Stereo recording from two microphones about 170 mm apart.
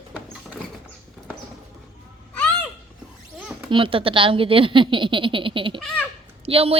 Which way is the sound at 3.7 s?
30° right (ahead or behind).